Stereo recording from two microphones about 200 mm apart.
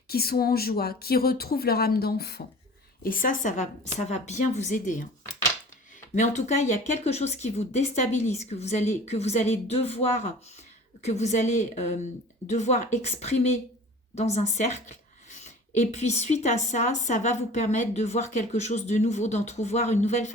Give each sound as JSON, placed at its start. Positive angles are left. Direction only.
{"t": 0.1, "sound": "speech", "side_deg": 50}
{"t": 6.1, "sound": "speech", "side_deg": 35}
{"t": 11.0, "sound": "speech", "side_deg": 35}